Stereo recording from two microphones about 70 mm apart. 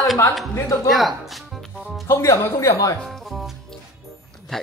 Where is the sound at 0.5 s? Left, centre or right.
Left.